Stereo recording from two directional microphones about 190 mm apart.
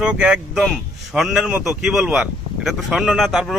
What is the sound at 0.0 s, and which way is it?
A man's voice, 5° right (ahead or behind).